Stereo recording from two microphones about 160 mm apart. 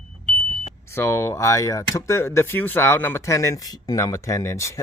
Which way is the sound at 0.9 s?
15° left (ahead or behind).